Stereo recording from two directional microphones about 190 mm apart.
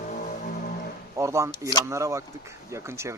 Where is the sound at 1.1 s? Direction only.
15° right (ahead or behind).